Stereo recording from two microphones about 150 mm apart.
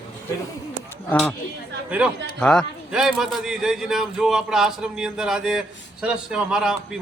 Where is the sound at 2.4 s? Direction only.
5° left (ahead or behind).